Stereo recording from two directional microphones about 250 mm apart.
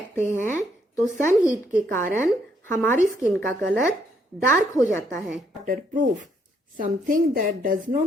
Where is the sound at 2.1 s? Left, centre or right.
Centre.